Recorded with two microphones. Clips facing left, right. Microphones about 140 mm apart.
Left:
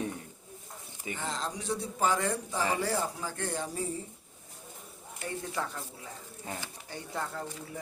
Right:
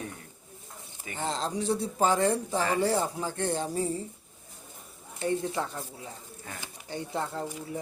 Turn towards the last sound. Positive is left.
turn(degrees=-25)  # may be behind; listen again after turning